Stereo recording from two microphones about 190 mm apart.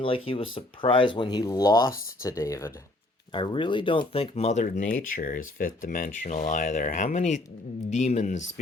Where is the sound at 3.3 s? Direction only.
25° left (ahead or behind).